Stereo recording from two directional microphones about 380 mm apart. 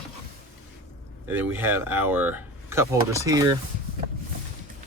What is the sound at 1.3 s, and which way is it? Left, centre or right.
Speech, centre.